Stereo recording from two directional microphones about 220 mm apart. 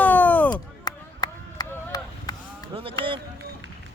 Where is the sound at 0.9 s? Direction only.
15° left (ahead or behind).